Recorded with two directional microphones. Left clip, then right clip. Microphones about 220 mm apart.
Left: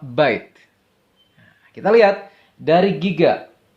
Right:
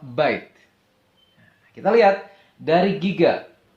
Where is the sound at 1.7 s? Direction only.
50° left (ahead or behind).